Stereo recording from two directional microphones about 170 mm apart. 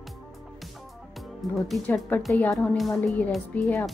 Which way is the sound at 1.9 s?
10° left (ahead or behind).